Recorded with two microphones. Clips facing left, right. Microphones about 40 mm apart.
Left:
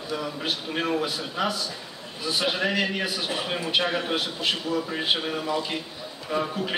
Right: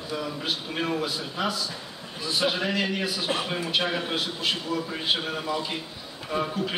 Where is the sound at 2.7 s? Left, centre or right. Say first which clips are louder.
Left 1 dB; centre.